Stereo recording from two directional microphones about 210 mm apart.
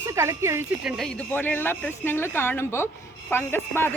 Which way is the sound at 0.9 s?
5° left (ahead or behind).